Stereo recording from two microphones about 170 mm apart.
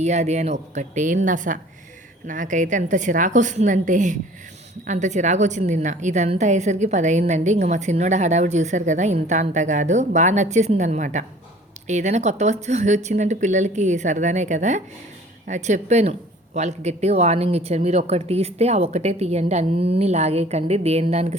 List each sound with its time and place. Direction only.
0.0 s a woman's voice: 40° right (ahead or behind)